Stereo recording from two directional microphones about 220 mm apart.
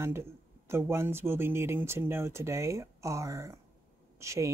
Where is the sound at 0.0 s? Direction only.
10° right (ahead or behind).